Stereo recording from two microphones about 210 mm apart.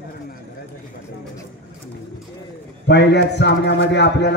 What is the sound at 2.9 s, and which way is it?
A man's voice, 55° left (ahead or behind).